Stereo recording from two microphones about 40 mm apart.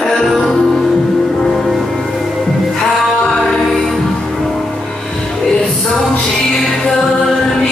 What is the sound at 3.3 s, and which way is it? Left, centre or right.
Music, centre.